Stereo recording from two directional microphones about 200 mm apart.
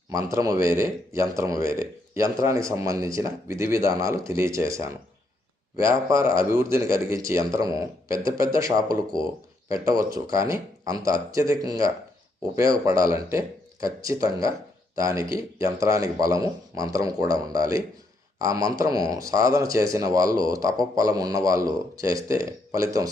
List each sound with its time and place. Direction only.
0.1 s speech: 15° right (ahead or behind)